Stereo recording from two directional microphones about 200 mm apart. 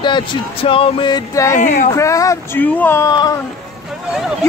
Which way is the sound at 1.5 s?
40° left (ahead or behind).